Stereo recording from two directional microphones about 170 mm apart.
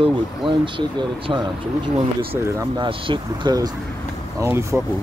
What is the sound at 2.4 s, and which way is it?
Speech, 20° right (ahead or behind).